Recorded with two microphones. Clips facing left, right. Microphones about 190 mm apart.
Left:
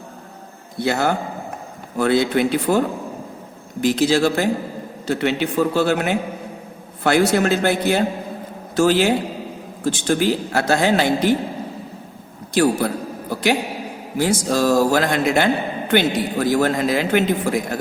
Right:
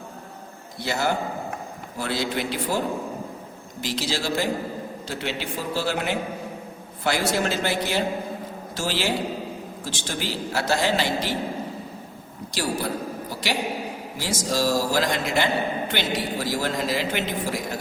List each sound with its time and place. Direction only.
0.9 s a man's voice: 55° left (ahead or behind)
12.5 s a man's voice: 55° left (ahead or behind)